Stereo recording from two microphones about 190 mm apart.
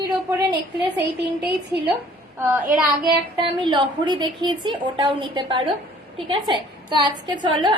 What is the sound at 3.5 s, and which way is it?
A woman's voice, 25° right (ahead or behind).